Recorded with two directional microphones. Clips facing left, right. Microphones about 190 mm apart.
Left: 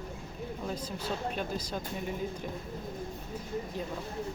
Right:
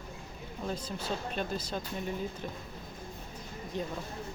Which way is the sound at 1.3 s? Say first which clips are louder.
Even; 10° left (ahead or behind).